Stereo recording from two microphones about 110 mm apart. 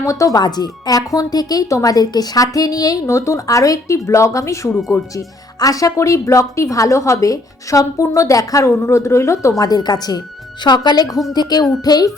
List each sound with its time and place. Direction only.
0.0 s a woman's voice: 30° left (ahead or behind)
4.7 s speech: 5° left (ahead or behind)
5.1 s a woman's voice: 30° left (ahead or behind)